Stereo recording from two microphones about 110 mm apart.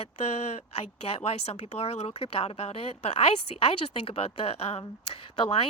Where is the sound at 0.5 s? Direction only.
65° left (ahead or behind).